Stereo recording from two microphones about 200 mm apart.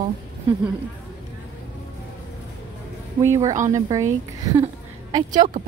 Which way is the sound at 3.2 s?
15° right (ahead or behind).